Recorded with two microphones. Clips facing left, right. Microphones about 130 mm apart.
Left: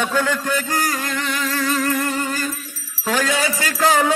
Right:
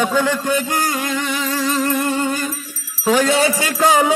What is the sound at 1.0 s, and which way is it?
Music, 5° right (ahead or behind).